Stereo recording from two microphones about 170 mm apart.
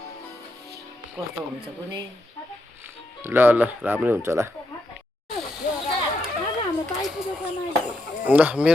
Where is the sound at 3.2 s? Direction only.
15° right (ahead or behind).